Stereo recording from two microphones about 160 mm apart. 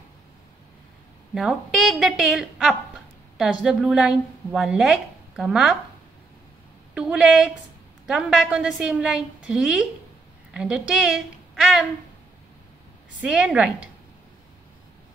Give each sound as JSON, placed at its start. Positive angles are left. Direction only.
{"t": 1.3, "sound": "a woman's voice", "side_deg": 0}
{"t": 6.9, "sound": "a woman's voice", "side_deg": -5}
{"t": 13.2, "sound": "a woman's voice", "side_deg": -5}